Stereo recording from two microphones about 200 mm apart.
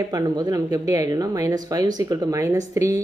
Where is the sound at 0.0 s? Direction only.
20° right (ahead or behind).